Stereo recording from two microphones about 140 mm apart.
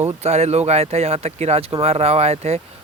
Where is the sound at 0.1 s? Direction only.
50° right (ahead or behind).